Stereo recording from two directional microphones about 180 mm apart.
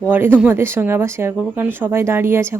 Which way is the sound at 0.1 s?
10° right (ahead or behind).